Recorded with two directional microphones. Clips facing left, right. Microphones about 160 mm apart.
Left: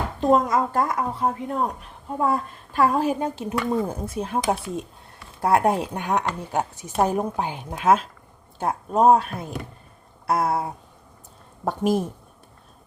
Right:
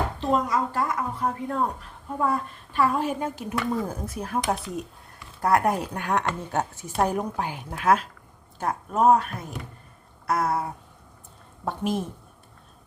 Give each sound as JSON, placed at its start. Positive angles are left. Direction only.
{"t": 0.2, "sound": "a woman's voice", "side_deg": 45}
{"t": 1.2, "sound": "a woman's voice", "side_deg": 20}
{"t": 2.3, "sound": "a woman's voice", "side_deg": 40}
{"t": 11.6, "sound": "a woman's voice", "side_deg": 40}